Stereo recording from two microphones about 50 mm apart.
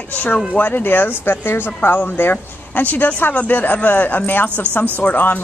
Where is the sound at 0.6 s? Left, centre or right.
Left.